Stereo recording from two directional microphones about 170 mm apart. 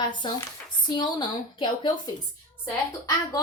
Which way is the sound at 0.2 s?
25° left (ahead or behind).